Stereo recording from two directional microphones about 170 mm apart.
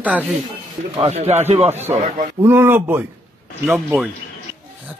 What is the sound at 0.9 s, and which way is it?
Speech, 35° right (ahead or behind).